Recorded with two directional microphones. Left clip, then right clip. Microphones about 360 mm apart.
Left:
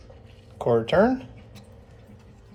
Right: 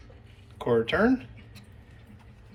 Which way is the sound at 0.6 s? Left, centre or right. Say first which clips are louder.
Left 4 dB; centre.